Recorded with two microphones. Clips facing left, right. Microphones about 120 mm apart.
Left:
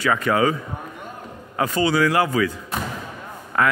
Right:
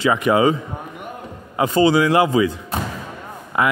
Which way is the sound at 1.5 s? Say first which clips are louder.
Right 4 dB; 25° right (ahead or behind).